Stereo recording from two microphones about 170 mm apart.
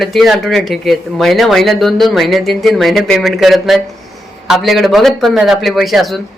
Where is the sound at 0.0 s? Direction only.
Centre (ahead or behind).